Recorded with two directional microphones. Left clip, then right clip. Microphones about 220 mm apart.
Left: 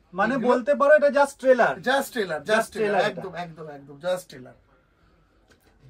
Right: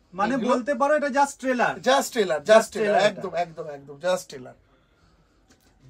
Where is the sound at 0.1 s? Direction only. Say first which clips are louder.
Left 2 dB; 20° left (ahead or behind).